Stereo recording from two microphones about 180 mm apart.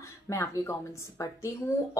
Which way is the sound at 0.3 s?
15° left (ahead or behind).